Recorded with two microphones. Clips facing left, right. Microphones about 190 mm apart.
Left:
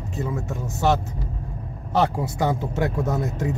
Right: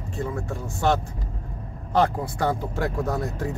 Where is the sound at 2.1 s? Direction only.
20° left (ahead or behind).